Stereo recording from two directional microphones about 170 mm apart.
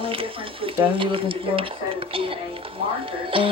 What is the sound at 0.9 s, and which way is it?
Speech, 30° right (ahead or behind).